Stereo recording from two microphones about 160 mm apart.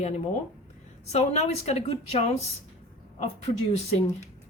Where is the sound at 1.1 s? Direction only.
45° left (ahead or behind).